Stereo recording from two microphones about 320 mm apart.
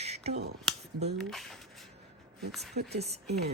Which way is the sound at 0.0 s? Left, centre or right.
Centre.